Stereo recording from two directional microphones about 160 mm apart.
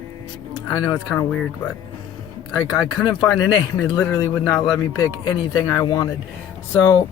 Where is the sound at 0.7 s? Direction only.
25° left (ahead or behind).